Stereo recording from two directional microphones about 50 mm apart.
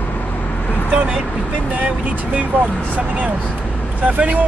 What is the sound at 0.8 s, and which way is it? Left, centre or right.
Speech, right.